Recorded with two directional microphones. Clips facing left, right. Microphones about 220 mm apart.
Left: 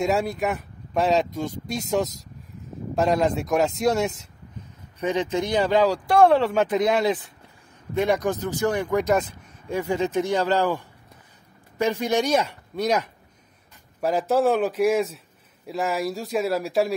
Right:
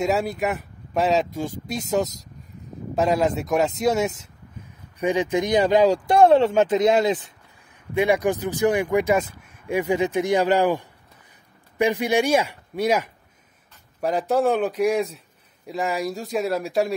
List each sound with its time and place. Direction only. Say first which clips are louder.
0.0 s speech: right 1 dB; centre (ahead or behind)